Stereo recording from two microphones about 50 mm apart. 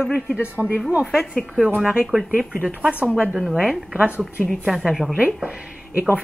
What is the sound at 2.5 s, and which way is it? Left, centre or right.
Speech, right.